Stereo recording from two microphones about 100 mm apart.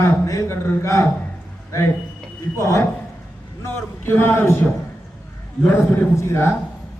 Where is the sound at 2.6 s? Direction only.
30° left (ahead or behind).